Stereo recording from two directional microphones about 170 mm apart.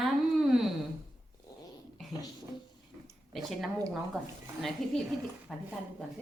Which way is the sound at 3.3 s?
Centre (ahead or behind).